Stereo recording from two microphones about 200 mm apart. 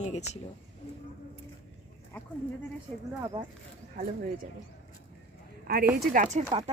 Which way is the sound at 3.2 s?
20° right (ahead or behind).